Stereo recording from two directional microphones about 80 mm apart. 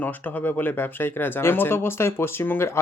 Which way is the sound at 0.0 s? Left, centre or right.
Left.